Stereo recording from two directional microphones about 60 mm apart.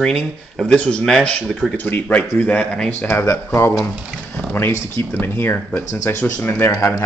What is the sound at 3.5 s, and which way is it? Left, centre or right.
Speech, left.